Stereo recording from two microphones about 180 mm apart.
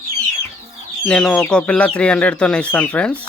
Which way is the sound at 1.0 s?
5° left (ahead or behind).